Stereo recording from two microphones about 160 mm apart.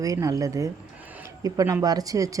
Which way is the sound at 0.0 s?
20° right (ahead or behind).